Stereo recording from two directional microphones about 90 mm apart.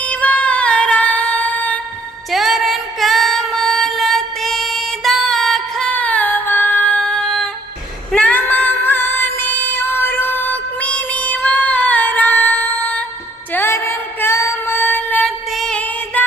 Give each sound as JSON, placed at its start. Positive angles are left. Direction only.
{"t": 0.0, "sound": "female singing", "side_deg": 15}
{"t": 2.3, "sound": "music", "side_deg": 0}
{"t": 5.9, "sound": "female singing", "side_deg": 15}
{"t": 8.1, "sound": "music", "side_deg": 15}
{"t": 15.4, "sound": "music", "side_deg": 0}
{"t": 15.7, "sound": "music", "side_deg": 15}